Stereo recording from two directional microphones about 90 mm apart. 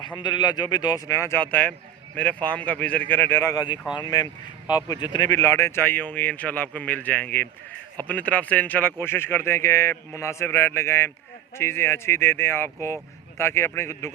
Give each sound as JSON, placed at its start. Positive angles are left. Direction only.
{"t": 0.2, "sound": "a man's voice", "side_deg": 55}
{"t": 1.4, "sound": "a man's voice", "side_deg": 20}
{"t": 3.4, "sound": "a man's voice", "side_deg": 40}
{"t": 5.4, "sound": "speech", "side_deg": 30}